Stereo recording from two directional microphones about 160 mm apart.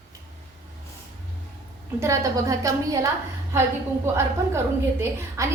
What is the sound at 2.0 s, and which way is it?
A woman's voice, 20° right (ahead or behind).